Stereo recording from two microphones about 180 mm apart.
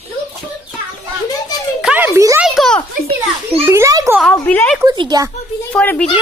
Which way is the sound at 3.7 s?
15° right (ahead or behind).